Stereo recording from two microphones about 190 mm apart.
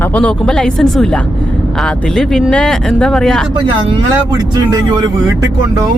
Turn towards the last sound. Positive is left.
turn(degrees=-20)  # may be behind; listen again after turning